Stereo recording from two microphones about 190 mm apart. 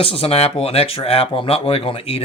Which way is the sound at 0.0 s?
30° left (ahead or behind).